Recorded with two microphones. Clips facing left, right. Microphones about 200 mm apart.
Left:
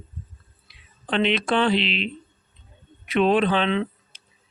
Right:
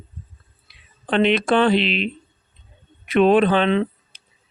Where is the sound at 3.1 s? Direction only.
50° right (ahead or behind).